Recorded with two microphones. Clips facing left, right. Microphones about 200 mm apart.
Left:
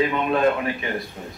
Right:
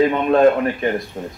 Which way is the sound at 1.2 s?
45° right (ahead or behind).